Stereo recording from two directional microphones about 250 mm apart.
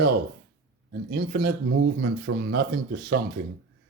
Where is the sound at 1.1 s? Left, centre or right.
Right.